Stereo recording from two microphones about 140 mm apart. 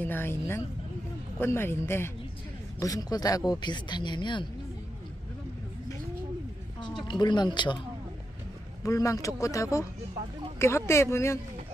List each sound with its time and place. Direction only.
0.0 s a woman's voice: 15° left (ahead or behind); by 4.5 s 35° left (ahead or behind)
7.1 s speech: 30° left (ahead or behind)
8.8 s speech: 25° left (ahead or behind)